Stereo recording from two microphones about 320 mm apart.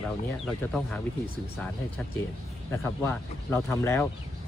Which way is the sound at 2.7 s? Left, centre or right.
Centre.